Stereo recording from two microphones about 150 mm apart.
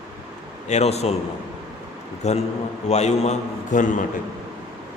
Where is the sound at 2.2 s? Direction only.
50° left (ahead or behind).